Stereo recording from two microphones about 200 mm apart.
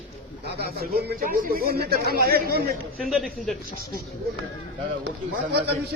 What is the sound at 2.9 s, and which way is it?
Speech, centre (ahead or behind).